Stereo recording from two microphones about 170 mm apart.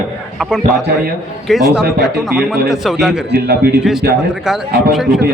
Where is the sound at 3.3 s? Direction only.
70° right (ahead or behind).